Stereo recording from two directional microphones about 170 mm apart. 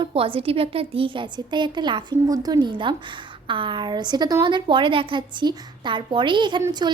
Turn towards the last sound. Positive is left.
turn(degrees=-25)  # may be behind; listen again after turning